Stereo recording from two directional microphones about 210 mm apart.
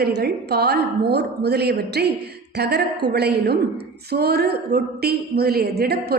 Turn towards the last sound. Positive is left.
turn(degrees=-50)  # may be behind; listen again after turning